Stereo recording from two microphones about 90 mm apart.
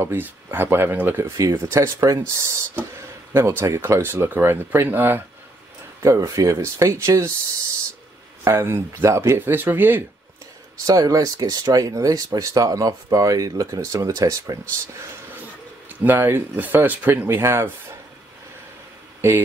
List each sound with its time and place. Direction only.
0.0 s speech: 25° right (ahead or behind)
6.0 s speech: 40° right (ahead or behind)
8.5 s speech: 30° right (ahead or behind)
9.4 s speech: 20° right (ahead or behind)
10.9 s speech: 40° right (ahead or behind)
15.9 s speech: 20° right (ahead or behind)
19.2 s speech: 30° right (ahead or behind)